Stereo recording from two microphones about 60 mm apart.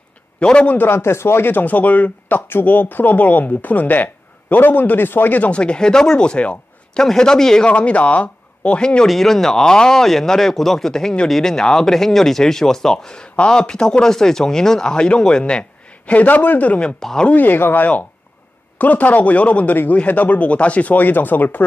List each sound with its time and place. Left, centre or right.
0.4 s speech: centre
0.7 s speech: left; by 7.7 s centre
7.7 s speech: left
9.0 s speech: centre
16.1 s speech: left
17.0 s speech: centre
17.3 s speech: left